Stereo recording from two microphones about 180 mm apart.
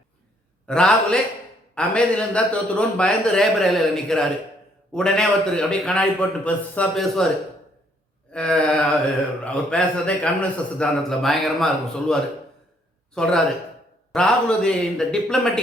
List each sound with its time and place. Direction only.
0.7 s a man's voice: 5° left (ahead or behind)
8.3 s a man's voice: 5° left (ahead or behind)